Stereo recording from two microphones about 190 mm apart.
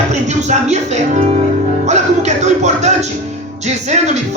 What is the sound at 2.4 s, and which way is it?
Music, 40° right (ahead or behind).